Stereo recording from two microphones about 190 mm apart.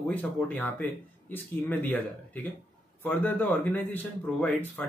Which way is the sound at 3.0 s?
10° left (ahead or behind).